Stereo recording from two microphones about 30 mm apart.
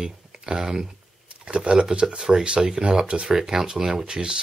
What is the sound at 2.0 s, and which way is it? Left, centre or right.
Speech, centre.